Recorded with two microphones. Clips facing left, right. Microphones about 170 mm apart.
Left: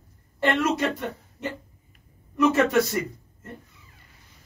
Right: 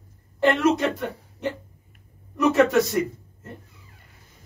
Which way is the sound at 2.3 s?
Centre (ahead or behind).